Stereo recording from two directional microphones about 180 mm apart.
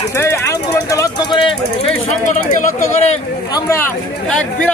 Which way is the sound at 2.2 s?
45° left (ahead or behind).